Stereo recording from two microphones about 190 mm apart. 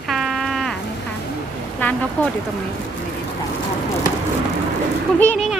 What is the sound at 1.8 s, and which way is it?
Speech, 10° left (ahead or behind).